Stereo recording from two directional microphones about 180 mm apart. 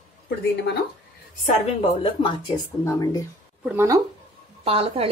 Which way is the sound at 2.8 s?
20° left (ahead or behind).